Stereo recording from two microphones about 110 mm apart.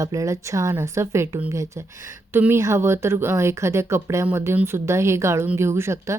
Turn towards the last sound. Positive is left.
turn(degrees=-25)  # may be behind; listen again after turning